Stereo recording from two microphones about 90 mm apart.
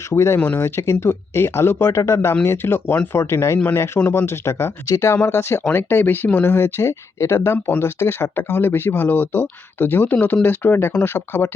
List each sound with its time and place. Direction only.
0.1 s speech: 30° left (ahead or behind)